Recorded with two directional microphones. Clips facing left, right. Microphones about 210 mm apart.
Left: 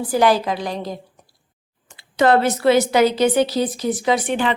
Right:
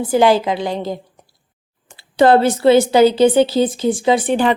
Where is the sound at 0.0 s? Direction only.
25° right (ahead or behind).